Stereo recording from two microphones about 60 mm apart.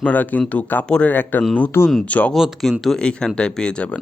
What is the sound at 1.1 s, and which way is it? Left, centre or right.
Speech, left.